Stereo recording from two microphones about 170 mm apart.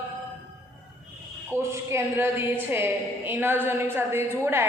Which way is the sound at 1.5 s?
15° right (ahead or behind).